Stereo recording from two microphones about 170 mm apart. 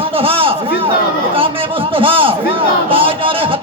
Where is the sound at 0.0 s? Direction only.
30° right (ahead or behind).